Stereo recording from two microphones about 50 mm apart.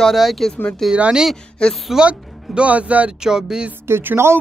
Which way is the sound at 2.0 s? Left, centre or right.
Right.